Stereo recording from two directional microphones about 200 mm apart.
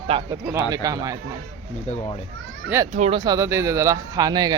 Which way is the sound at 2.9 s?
35° right (ahead or behind).